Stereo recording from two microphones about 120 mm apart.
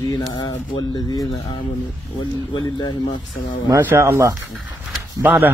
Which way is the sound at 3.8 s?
20° right (ahead or behind).